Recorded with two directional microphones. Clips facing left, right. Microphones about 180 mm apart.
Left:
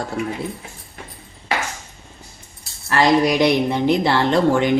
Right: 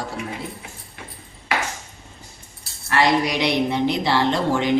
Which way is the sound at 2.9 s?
45° left (ahead or behind).